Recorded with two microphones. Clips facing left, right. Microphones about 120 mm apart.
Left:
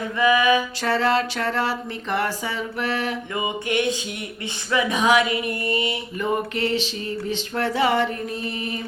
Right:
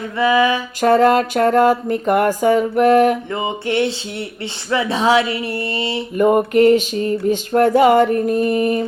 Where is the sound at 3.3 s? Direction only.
25° right (ahead or behind).